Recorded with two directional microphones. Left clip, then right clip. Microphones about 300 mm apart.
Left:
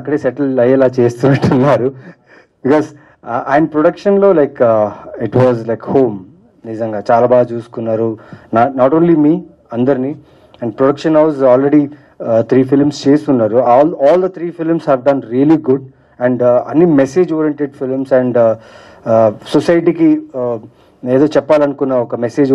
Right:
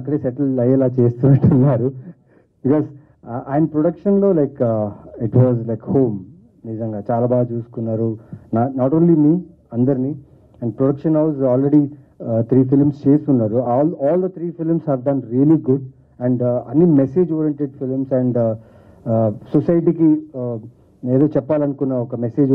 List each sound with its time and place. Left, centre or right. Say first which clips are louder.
0.0 s speech: left 6 dB; centre
20.3 s speech: left 8 dB; left
21.0 s speech: left 6 dB; centre